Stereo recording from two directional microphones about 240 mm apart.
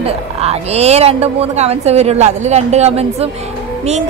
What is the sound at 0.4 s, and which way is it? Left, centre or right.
A woman's voice, right.